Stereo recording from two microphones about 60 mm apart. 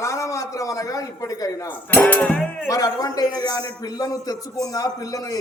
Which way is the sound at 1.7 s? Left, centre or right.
Left.